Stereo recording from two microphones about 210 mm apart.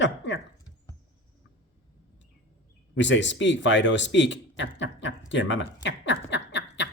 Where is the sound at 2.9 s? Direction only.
60° left (ahead or behind).